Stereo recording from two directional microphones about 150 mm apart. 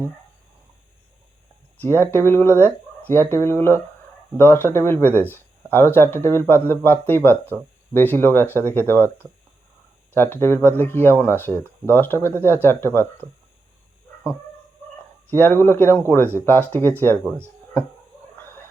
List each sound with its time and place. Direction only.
1.8 s speech: 15° left (ahead or behind)
9.0 s speech: 15° right (ahead or behind)
10.2 s speech: 15° left (ahead or behind)
15.4 s speech: 15° left (ahead or behind)